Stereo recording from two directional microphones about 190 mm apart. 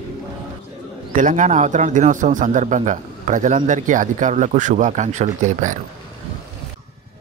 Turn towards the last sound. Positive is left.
turn(degrees=-40)  # may be behind; listen again after turning